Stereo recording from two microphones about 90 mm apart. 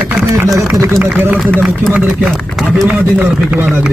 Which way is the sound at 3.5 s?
30° right (ahead or behind).